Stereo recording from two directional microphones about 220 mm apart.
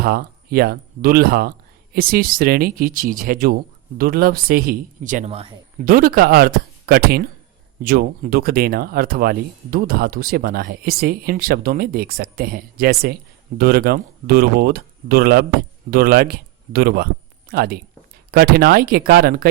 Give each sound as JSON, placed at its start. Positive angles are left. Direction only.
{"t": 0.0, "sound": "speech", "side_deg": -45}